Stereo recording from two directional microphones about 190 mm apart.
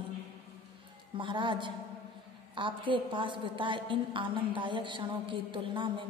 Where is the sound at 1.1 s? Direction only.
25° right (ahead or behind).